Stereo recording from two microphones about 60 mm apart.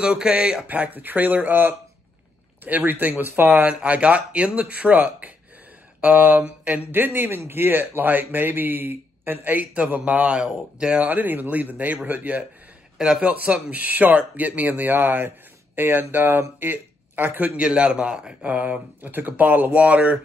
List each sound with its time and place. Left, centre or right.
0.0 s a man's voice: centre
0.7 s speech: right
3.4 s speech: centre
11.1 s speech: right
12.9 s speech: centre; by 17.5 s right
17.6 s a man's voice: centre
18.5 s speech: right